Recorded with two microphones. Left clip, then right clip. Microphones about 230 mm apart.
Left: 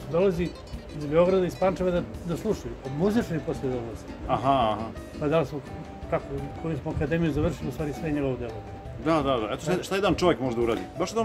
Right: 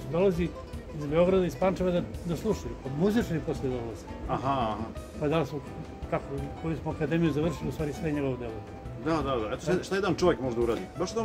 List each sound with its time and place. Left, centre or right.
0.1 s speech: centre
4.3 s speech: left
5.2 s speech: centre
9.0 s speech: left